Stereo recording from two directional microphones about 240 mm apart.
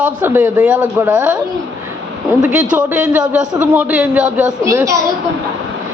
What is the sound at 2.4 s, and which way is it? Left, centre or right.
A man's voice, centre.